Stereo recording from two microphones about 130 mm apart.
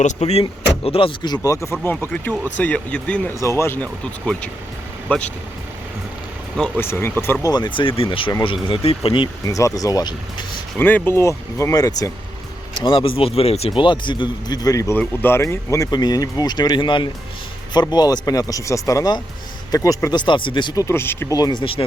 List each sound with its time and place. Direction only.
0.0 s speech: 60° left (ahead or behind)
0.9 s speech: 45° left (ahead or behind)
1.4 s speech: 20° left (ahead or behind)
3.4 s speech: 20° left (ahead or behind)
6.7 s speech: 20° left (ahead or behind)
7.4 s speech: 30° left (ahead or behind)
9.4 s speech: 25° left (ahead or behind)
10.8 s speech: 15° left (ahead or behind)
12.8 s speech: 40° left (ahead or behind)
20.8 s speech: 20° left (ahead or behind)
21.3 s speech: 35° left (ahead or behind)